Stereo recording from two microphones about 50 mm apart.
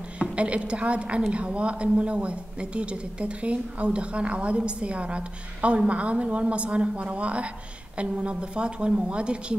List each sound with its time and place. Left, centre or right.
0.2 s a woman's voice: right